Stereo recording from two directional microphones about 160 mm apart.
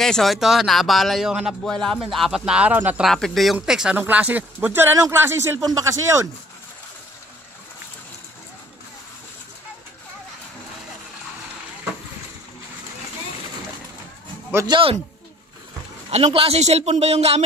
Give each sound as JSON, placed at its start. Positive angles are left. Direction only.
{"t": 0.0, "sound": "speech", "side_deg": 0}
{"t": 3.1, "sound": "speech", "side_deg": 0}
{"t": 14.7, "sound": "a man's voice", "side_deg": -35}
{"t": 16.1, "sound": "a man's voice", "side_deg": -40}